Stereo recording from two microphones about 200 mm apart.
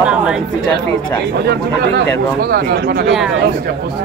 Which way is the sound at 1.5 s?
55° right (ahead or behind).